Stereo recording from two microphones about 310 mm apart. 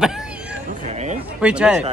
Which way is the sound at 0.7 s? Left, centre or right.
Right.